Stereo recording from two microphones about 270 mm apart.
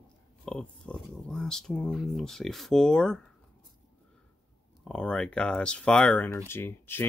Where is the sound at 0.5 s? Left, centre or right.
Centre.